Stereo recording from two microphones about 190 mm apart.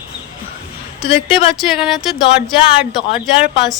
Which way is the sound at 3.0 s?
30° left (ahead or behind).